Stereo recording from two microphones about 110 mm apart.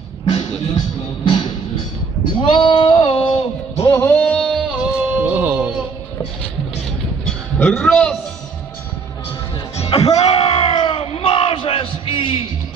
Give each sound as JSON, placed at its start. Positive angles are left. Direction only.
{"t": 0.2, "sound": "music", "side_deg": 70}
{"t": 0.7, "sound": "music", "side_deg": 45}
{"t": 2.4, "sound": "a sound", "side_deg": 50}
{"t": 4.0, "sound": "music", "side_deg": 15}
{"t": 4.6, "sound": "music", "side_deg": -10}
{"t": 7.7, "sound": "a man's voice", "side_deg": 10}
{"t": 9.8, "sound": "music", "side_deg": 55}
{"t": 10.1, "sound": "crowd", "side_deg": 65}